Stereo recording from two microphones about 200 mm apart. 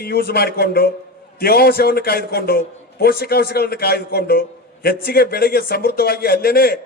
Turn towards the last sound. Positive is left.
turn(degrees=50)  # may be behind; listen again after turning